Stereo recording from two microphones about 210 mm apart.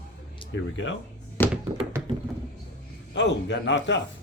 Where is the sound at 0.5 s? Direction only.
60° left (ahead or behind).